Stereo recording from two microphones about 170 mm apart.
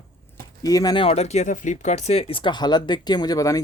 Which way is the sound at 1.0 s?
40° left (ahead or behind).